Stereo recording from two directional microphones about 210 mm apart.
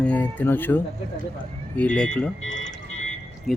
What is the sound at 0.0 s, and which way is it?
Speech, 5° left (ahead or behind).